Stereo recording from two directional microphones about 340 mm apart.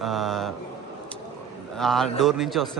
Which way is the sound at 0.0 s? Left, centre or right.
Centre.